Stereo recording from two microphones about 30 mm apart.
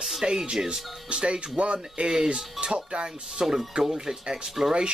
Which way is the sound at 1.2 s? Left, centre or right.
Right.